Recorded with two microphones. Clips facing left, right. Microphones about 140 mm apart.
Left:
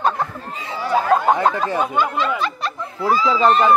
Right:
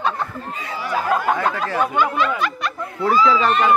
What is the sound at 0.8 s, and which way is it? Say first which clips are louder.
Speech: left 4 dB; 25° left (ahead or behind).